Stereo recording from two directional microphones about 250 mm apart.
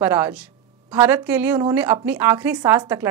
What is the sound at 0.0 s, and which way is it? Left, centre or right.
A woman's voice, centre.